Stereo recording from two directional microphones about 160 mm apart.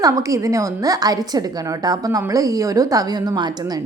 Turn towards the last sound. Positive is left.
turn(degrees=-25)  # may be behind; listen again after turning